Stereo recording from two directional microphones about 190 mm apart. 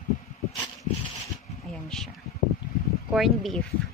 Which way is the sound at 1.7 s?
Centre (ahead or behind).